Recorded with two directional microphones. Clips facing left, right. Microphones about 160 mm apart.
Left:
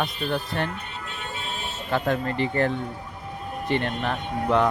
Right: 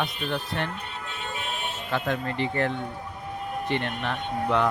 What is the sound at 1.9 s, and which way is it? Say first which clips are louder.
Speech: left 4 dB; 40° left (ahead or behind).